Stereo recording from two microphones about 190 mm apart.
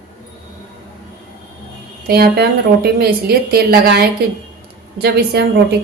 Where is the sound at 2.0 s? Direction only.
55° right (ahead or behind).